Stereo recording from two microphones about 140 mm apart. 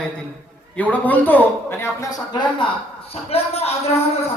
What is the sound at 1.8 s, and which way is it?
Speech, 25° left (ahead or behind).